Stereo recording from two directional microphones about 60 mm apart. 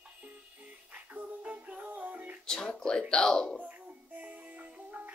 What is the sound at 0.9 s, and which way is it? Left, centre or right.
Music, right.